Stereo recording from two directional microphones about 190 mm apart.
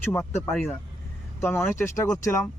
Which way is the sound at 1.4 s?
10° left (ahead or behind).